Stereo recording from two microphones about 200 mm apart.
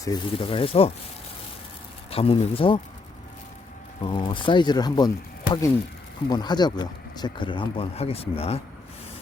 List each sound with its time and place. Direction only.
0.0 s speech: 20° left (ahead or behind)
2.0 s speech: 30° left (ahead or behind)
4.0 s speech: 25° left (ahead or behind)